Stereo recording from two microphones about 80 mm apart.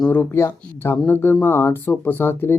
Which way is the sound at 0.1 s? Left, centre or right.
Left.